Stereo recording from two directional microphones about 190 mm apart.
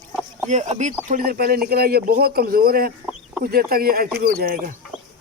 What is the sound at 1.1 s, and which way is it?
Speech, 50° right (ahead or behind).